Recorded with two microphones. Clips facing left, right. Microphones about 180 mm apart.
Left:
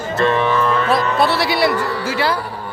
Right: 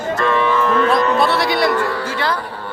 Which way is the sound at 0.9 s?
5° left (ahead or behind).